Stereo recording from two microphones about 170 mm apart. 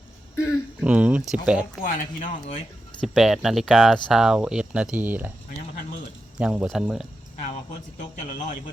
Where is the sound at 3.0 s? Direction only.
Centre (ahead or behind).